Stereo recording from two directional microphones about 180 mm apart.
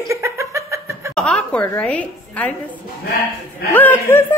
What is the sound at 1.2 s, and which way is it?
Speech, 5° left (ahead or behind).